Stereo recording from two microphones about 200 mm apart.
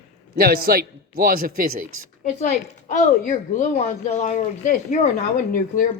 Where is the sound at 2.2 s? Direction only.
35° left (ahead or behind).